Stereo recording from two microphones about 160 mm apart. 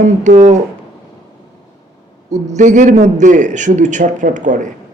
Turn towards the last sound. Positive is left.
turn(degrees=-50)  # may be behind; listen again after turning